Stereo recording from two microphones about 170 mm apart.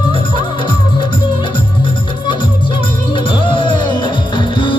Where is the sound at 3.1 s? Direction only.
30° left (ahead or behind).